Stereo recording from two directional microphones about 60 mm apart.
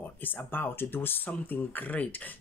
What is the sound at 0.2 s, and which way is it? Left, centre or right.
Speech, left.